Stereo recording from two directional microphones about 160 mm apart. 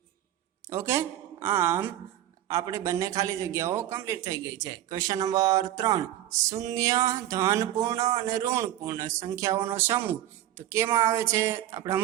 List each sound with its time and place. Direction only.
0.7 s speech: 15° right (ahead or behind)
2.5 s a sound: 20° right (ahead or behind)
10.6 s speech: 15° right (ahead or behind)